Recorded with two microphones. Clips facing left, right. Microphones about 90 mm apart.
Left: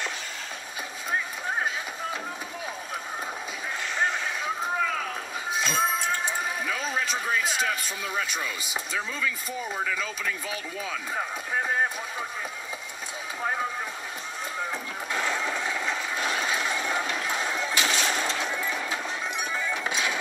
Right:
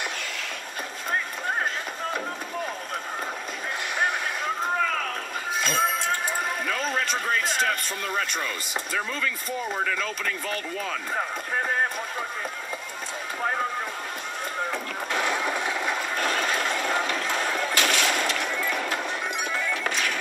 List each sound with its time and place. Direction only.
5.6 s music: 15° left (ahead or behind)
6.7 s speech: 5° left (ahead or behind)
9.7 s speech: 5° left (ahead or behind)
14.7 s vehicle: 65° right (ahead or behind)
15.2 s vehicle: 15° right (ahead or behind)
16.2 s a sound: 55° right (ahead or behind)
18.7 s music: 60° right (ahead or behind)
19.5 s music: 15° left (ahead or behind)